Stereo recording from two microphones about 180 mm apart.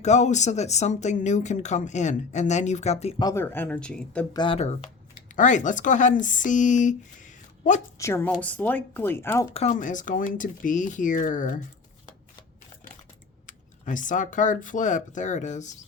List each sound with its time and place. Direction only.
0.0 s speech: 40° left (ahead or behind)
3.2 s speech: 15° left (ahead or behind)
4.4 s speech: 30° left (ahead or behind)
7.9 s speech: 15° left (ahead or behind)
9.5 s speech: 30° left (ahead or behind)
9.7 s speech: 45° left (ahead or behind)
13.5 s speech: 45° left (ahead or behind)